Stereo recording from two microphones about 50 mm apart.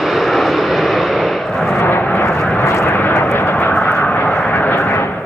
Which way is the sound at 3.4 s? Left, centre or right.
Left.